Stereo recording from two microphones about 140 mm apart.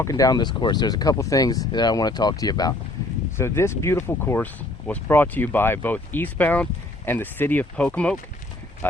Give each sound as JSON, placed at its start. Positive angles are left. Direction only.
{"t": 0.0, "sound": "speech", "side_deg": 25}